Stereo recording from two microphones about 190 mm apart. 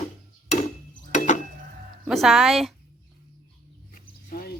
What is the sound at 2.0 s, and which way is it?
Speech, centre (ahead or behind).